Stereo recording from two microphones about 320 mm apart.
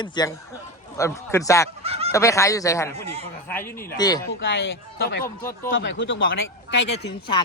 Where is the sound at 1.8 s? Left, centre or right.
Centre.